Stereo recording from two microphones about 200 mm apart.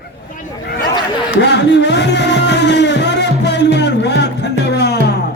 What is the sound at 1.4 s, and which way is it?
Music, 60° left (ahead or behind).